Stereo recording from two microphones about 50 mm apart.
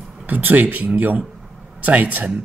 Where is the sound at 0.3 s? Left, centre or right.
Right.